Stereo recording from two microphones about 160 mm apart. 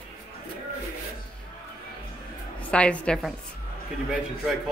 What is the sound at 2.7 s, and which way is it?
Speech, 5° left (ahead or behind).